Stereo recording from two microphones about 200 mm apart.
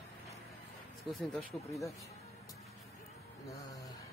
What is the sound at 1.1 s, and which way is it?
Speech, centre (ahead or behind).